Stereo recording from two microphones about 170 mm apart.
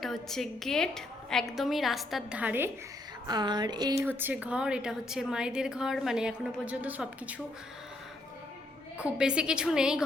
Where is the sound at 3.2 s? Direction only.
25° right (ahead or behind).